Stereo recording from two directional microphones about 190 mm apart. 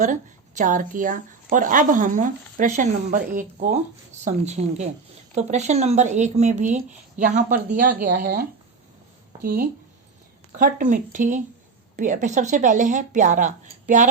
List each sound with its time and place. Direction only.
0.0 s a woman's voice: 40° right (ahead or behind)